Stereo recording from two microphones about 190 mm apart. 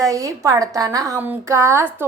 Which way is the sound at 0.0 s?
20° right (ahead or behind).